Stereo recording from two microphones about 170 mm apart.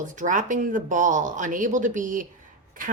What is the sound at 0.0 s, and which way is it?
A woman's voice, 50° right (ahead or behind).